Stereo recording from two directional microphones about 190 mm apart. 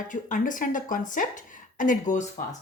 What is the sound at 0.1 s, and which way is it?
A woman's voice, 45° left (ahead or behind).